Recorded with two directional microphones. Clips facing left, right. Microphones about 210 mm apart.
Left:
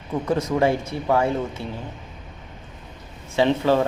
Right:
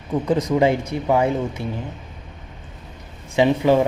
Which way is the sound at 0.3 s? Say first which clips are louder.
Right 2 dB; 15° right (ahead or behind).